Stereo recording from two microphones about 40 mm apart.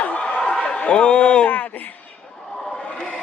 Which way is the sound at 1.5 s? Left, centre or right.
Left.